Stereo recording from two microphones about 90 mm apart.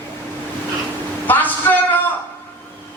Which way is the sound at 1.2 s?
20° left (ahead or behind).